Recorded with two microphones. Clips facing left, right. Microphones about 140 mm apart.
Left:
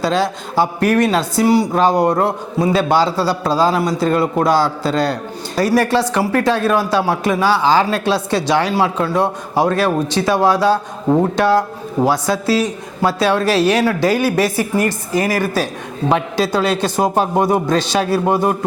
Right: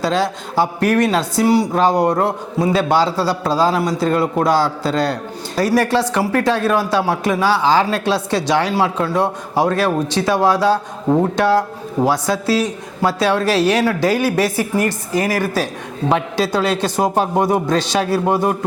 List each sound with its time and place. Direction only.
0.0 s speech: 10° left (ahead or behind)